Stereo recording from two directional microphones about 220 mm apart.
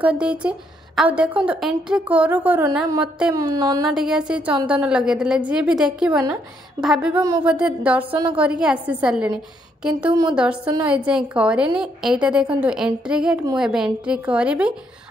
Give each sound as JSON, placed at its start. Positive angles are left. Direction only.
{"t": 0.0, "sound": "a woman's voice", "side_deg": -5}
{"t": 3.3, "sound": "speech", "side_deg": -15}
{"t": 3.9, "sound": "a woman's voice", "side_deg": -5}
{"t": 8.1, "sound": "a woman's voice", "side_deg": -25}
{"t": 8.4, "sound": "a woman's voice", "side_deg": -5}
{"t": 10.3, "sound": "a woman's voice", "side_deg": -5}